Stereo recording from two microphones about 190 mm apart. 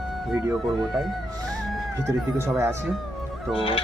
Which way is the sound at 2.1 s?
15° right (ahead or behind).